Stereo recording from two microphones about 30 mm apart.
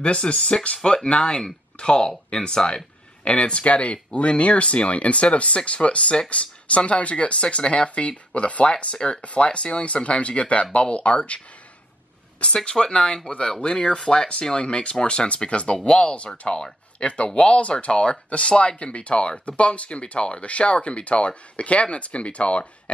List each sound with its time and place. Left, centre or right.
0.0 s speech: left
8.9 s speech: left
9.2 s speech: left
12.6 s speech: left